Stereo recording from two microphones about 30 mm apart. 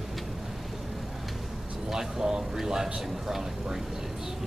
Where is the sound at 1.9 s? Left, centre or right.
Centre.